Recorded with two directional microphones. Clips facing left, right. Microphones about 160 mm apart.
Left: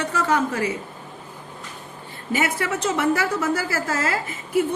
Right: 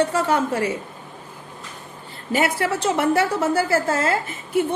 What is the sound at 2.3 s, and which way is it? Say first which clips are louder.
A woman's voice: right 3 dB; 30° right (ahead or behind).